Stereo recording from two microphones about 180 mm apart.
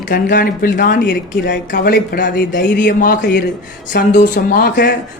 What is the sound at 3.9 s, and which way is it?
Speech, 55° left (ahead or behind).